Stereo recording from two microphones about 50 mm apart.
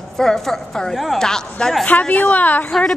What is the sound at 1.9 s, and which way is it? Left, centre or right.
Speech, left.